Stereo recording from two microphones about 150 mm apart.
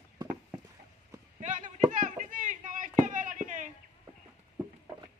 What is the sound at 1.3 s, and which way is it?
Chop, 55° right (ahead or behind).